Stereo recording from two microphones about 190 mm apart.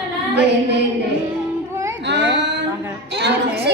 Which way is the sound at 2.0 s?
70° right (ahead or behind).